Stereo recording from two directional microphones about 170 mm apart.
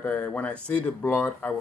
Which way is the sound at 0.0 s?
10° left (ahead or behind).